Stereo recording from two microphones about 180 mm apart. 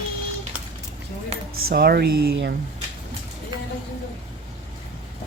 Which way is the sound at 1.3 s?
35° right (ahead or behind).